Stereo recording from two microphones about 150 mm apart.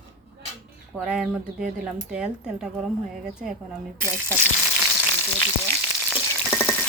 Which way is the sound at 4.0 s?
10° left (ahead or behind).